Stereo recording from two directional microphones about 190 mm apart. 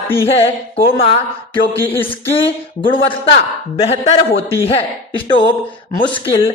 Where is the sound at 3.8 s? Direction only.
35° left (ahead or behind).